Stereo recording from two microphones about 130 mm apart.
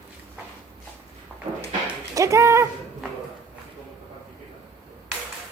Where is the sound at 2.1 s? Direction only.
25° right (ahead or behind).